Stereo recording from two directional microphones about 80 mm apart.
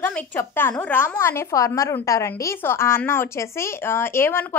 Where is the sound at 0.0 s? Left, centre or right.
Left.